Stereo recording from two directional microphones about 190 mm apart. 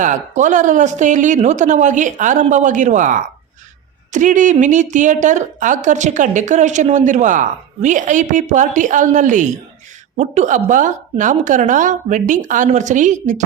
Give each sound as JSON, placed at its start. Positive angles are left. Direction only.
{"t": 0.0, "sound": "a woman's voice", "side_deg": -40}